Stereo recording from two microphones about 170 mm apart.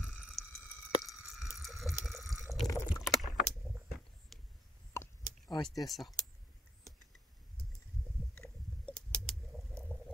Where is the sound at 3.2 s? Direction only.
Centre (ahead or behind).